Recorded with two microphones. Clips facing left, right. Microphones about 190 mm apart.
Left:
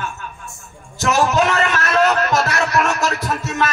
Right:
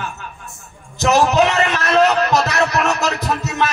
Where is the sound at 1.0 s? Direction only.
20° right (ahead or behind).